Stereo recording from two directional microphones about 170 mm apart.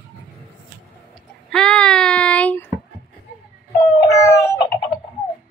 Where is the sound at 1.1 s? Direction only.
5° left (ahead or behind).